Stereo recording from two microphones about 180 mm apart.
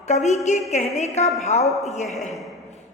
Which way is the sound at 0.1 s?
40° left (ahead or behind).